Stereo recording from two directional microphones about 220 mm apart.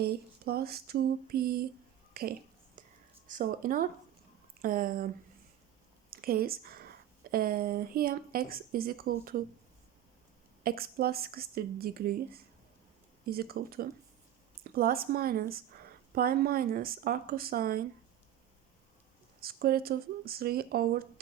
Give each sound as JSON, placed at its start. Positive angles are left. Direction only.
{"t": 0.0, "sound": "a woman's voice", "side_deg": -45}
{"t": 2.8, "sound": "whispering", "side_deg": -40}
{"t": 3.2, "sound": "speech", "side_deg": -40}
{"t": 6.1, "sound": "speech", "side_deg": -40}
{"t": 10.6, "sound": "a woman's voice", "side_deg": -40}
{"t": 19.4, "sound": "a woman's voice", "side_deg": -45}